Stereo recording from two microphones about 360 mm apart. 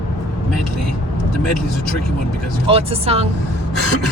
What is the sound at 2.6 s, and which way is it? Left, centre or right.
Speech, centre.